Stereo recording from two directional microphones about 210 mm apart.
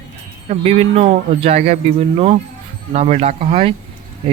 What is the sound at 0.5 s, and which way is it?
Speech, 30° right (ahead or behind).